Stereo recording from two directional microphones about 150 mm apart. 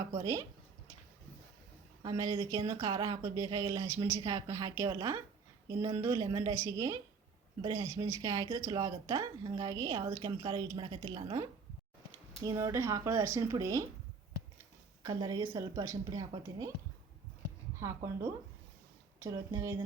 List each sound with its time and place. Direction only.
0.0 s speech: 25° right (ahead or behind)
2.0 s speech: 25° right (ahead or behind)
12.5 s speech: 20° right (ahead or behind)
15.0 s speech: 25° right (ahead or behind)
17.7 s a woman's voice: 20° right (ahead or behind)
19.2 s speech: 25° right (ahead or behind)